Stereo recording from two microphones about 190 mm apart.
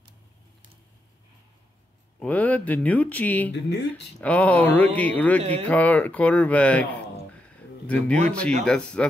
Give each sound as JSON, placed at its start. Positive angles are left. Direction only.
{"t": 2.1, "sound": "speech", "side_deg": 10}
{"t": 3.5, "sound": "speech", "side_deg": 60}
{"t": 4.2, "sound": "speech", "side_deg": 5}
{"t": 5.4, "sound": "speech", "side_deg": -35}
{"t": 5.7, "sound": "speech", "side_deg": 10}